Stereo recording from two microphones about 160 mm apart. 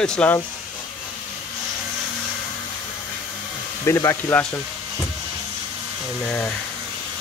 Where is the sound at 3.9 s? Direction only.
15° left (ahead or behind).